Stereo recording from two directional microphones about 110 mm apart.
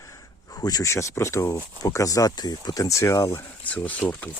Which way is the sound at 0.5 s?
35° left (ahead or behind).